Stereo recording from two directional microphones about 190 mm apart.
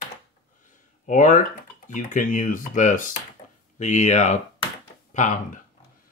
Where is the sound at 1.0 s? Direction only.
40° left (ahead or behind).